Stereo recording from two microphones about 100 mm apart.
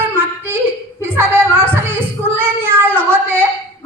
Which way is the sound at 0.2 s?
20° right (ahead or behind).